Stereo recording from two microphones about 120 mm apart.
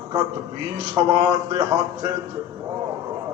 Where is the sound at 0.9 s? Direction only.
35° right (ahead or behind).